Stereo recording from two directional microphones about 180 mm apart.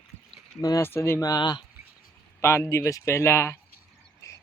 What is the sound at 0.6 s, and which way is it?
Speech, 15° left (ahead or behind).